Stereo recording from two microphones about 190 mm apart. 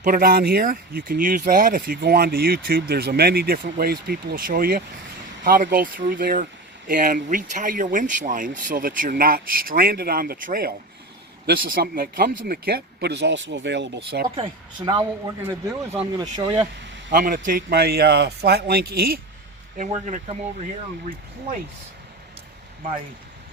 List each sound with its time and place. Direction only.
0.0 s speech: 50° right (ahead or behind)
14.3 s speech: 25° right (ahead or behind)
17.1 s speech: 45° right (ahead or behind)
19.7 s speech: 40° right (ahead or behind)